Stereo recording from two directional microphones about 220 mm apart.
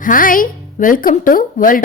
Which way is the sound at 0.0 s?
40° left (ahead or behind).